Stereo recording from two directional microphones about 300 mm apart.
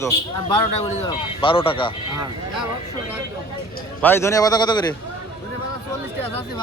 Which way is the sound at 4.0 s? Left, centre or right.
Centre.